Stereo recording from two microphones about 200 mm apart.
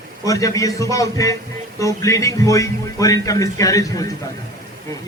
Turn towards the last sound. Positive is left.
turn(degrees=15)  # may be behind; listen again after turning